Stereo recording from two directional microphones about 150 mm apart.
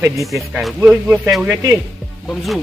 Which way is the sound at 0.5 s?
5° right (ahead or behind).